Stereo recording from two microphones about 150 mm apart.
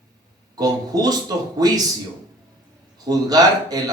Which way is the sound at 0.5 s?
25° right (ahead or behind).